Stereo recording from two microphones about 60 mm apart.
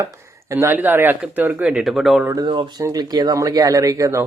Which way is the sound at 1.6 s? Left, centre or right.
Centre.